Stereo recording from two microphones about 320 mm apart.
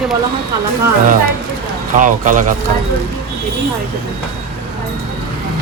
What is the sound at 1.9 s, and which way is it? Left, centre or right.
Speech, right.